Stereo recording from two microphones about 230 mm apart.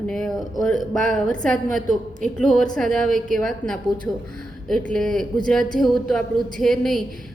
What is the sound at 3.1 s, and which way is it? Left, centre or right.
Speech, right.